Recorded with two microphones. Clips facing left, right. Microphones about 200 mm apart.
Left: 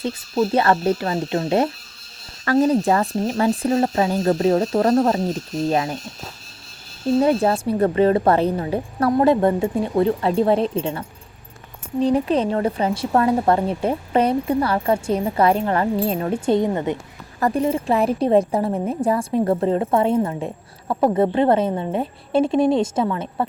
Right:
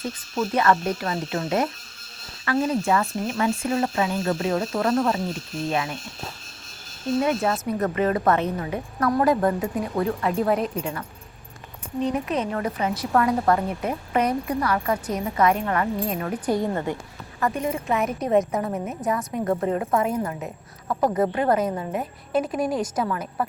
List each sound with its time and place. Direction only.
0.3 s speech: 35° left (ahead or behind)
7.2 s a woman's voice: 35° left (ahead or behind)
17.4 s a woman's voice: 35° left (ahead or behind)